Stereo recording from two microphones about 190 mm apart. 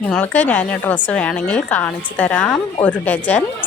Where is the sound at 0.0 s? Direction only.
10° left (ahead or behind).